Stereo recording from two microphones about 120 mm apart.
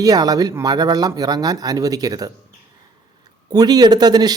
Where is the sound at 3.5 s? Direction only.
35° right (ahead or behind).